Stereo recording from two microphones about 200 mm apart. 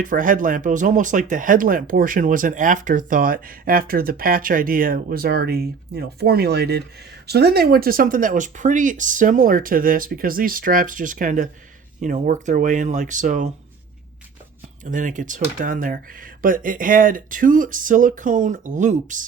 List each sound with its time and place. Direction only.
0.0 s speech: 40° right (ahead or behind)
14.8 s speech: 40° right (ahead or behind)